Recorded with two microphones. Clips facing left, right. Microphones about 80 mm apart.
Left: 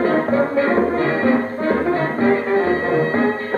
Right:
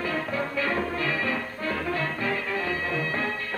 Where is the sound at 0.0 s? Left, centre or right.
Left.